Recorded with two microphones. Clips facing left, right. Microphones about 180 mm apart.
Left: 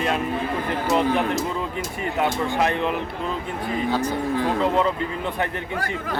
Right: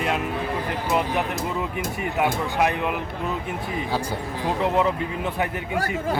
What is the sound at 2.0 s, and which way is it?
Speech, 10° right (ahead or behind).